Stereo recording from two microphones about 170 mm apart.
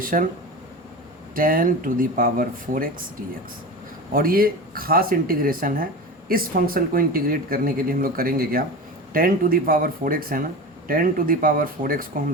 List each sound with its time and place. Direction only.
0.0 s speech: 55° right (ahead or behind)
1.4 s speech: 55° right (ahead or behind)
4.1 s speech: 60° right (ahead or behind)